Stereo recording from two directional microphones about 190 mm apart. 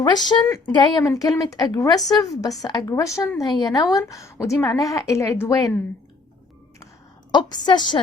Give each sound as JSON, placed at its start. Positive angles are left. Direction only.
{"t": 0.0, "sound": "a woman's voice", "side_deg": 20}
{"t": 7.3, "sound": "speech", "side_deg": 20}